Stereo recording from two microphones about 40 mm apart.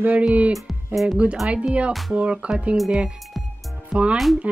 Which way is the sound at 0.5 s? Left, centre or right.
Centre.